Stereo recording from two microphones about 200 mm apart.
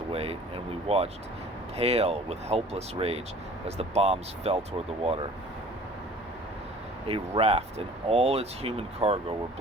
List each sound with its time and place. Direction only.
0.1 s speech: 30° right (ahead or behind)
7.1 s speech: 30° right (ahead or behind)